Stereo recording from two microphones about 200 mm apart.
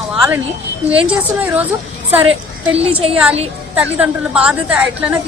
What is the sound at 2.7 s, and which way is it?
Speech, 30° right (ahead or behind).